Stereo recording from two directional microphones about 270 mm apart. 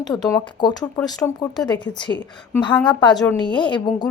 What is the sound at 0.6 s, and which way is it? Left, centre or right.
Speech, centre.